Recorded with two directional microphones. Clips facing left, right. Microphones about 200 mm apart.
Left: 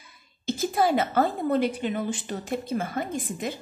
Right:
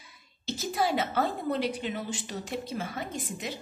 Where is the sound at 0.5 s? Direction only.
50° left (ahead or behind).